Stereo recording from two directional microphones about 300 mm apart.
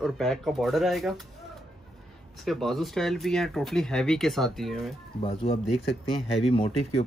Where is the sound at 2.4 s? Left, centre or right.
Centre.